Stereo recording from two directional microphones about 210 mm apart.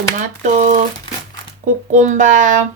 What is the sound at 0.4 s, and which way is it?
Speech, 35° right (ahead or behind).